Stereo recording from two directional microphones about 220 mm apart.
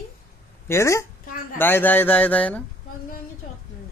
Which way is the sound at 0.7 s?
15° left (ahead or behind).